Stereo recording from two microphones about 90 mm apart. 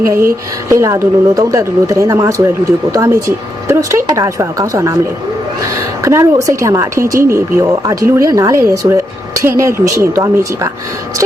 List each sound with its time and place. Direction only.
0.7 s speech: 30° right (ahead or behind)
6.0 s speech: 35° right (ahead or behind)